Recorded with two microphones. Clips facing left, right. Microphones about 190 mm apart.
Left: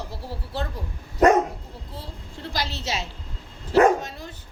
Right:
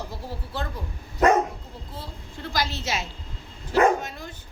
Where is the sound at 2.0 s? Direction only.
35° left (ahead or behind).